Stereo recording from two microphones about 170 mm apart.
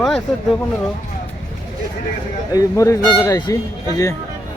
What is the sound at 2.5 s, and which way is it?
Speech, 20° left (ahead or behind).